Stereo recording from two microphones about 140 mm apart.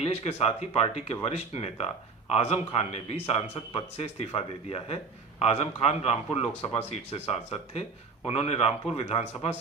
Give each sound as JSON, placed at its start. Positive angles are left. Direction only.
{"t": 0.0, "sound": "speech", "side_deg": 50}